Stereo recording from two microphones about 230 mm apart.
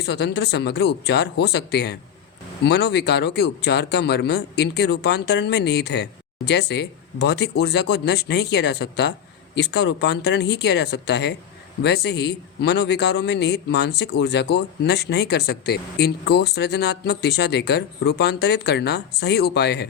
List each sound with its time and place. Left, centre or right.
0.0 s a man's voice: left